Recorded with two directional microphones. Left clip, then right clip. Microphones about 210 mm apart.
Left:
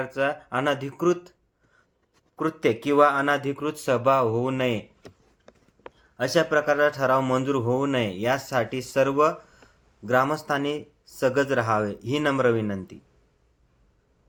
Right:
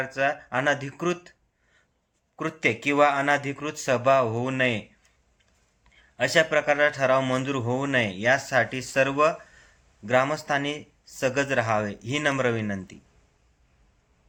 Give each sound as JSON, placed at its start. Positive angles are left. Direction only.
{"t": 0.0, "sound": "a man's voice", "side_deg": 10}
{"t": 2.3, "sound": "a man's voice", "side_deg": 10}
{"t": 6.1, "sound": "a man's voice", "side_deg": 10}